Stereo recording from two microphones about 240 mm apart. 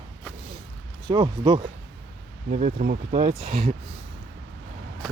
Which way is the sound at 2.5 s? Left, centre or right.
Right.